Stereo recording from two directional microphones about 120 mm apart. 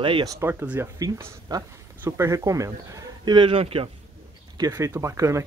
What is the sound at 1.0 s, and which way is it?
Speech, 30° right (ahead or behind).